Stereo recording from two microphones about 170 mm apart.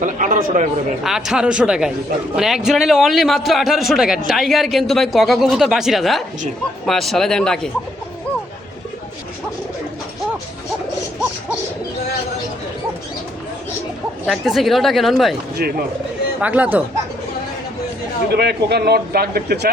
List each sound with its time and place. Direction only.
0.0 s speech: 50° right (ahead or behind)
1.0 s a man's voice: 5° right (ahead or behind)
14.3 s a man's voice: centre (ahead or behind)
15.6 s speech: 60° right (ahead or behind)
16.4 s speech: 10° right (ahead or behind)
18.3 s speech: 75° right (ahead or behind)